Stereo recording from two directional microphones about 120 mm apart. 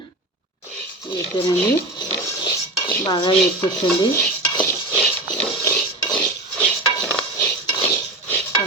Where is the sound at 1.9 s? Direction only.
35° left (ahead or behind).